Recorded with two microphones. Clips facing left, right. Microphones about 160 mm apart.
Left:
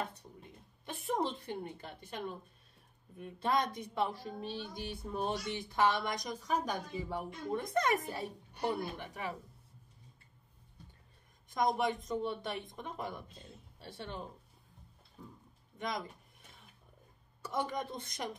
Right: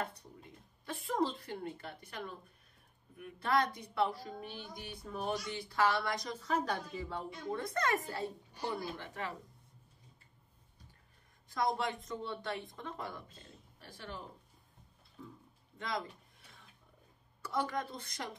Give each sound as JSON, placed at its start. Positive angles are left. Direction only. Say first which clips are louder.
{"t": 0.8, "sound": "a woman's voice", "louder": "right 1 dB", "side_deg": 20}
{"t": 11.5, "sound": "a woman's voice", "louder": "left 3 dB", "side_deg": 20}
{"t": 17.5, "sound": "a woman's voice", "louder": "even", "side_deg": 20}